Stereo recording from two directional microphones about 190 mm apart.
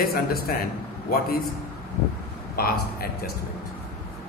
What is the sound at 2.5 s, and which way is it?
Speech, 50° left (ahead or behind).